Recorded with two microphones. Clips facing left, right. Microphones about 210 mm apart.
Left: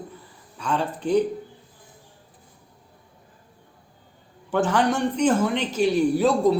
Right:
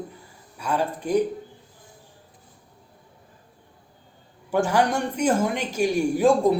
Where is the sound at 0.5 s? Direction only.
10° right (ahead or behind).